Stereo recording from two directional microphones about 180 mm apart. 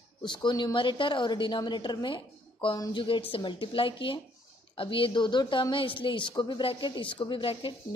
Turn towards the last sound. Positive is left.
turn(degrees=30)  # may be behind; listen again after turning